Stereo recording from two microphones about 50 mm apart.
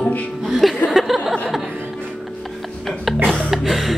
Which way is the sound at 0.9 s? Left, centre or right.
Centre.